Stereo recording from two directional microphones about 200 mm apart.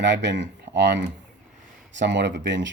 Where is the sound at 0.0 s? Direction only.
60° right (ahead or behind).